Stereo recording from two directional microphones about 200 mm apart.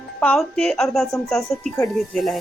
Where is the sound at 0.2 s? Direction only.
5° left (ahead or behind).